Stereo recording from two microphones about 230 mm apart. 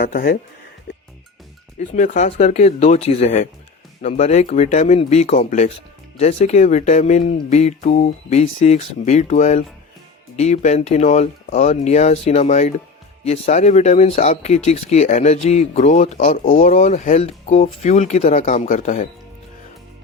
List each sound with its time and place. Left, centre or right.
0.0 s speech: left
1.8 s speech: left